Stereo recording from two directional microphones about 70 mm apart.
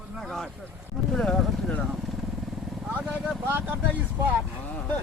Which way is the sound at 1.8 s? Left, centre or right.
Centre.